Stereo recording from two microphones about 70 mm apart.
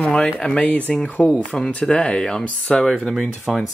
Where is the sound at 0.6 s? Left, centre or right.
Left; by 3.6 s centre.